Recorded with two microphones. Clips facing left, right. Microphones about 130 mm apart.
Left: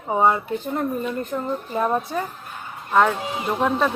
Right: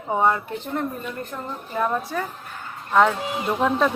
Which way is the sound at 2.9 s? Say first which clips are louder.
Even; centre (ahead or behind).